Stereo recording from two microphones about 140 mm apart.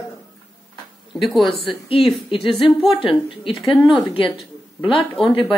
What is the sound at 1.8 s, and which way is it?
A woman's voice, 40° left (ahead or behind).